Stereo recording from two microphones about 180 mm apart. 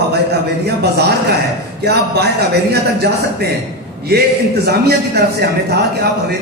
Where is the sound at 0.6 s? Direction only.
65° right (ahead or behind).